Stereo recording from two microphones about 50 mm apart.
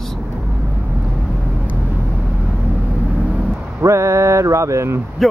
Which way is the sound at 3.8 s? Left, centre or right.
Right.